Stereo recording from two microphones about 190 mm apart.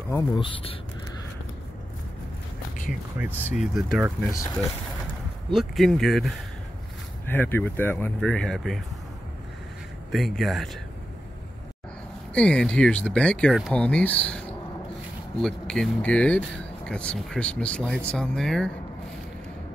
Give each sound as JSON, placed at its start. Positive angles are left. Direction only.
{"t": 0.1, "sound": "speech", "side_deg": 25}
{"t": 3.5, "sound": "speech", "side_deg": 0}
{"t": 5.5, "sound": "speech", "side_deg": 0}
{"t": 10.1, "sound": "speech", "side_deg": 0}
{"t": 12.4, "sound": "speech", "side_deg": 5}
{"t": 15.4, "sound": "speech", "side_deg": 5}